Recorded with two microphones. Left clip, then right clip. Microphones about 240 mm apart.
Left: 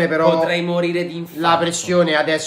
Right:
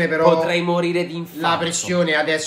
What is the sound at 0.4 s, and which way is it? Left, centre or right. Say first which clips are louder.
Speech: left 1 dB; centre.